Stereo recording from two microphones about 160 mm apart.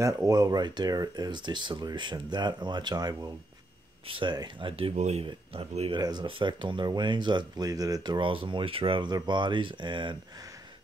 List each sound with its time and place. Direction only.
0.0 s speech: 20° right (ahead or behind)